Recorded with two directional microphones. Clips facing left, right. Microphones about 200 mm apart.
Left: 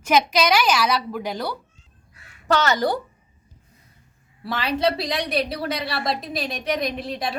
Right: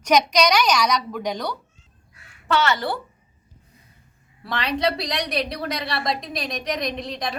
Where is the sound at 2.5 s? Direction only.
40° left (ahead or behind).